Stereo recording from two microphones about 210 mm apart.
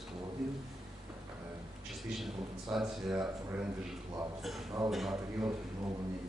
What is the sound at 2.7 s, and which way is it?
Speech, centre (ahead or behind).